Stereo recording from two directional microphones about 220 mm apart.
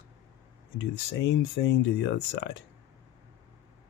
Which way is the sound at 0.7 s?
55° left (ahead or behind).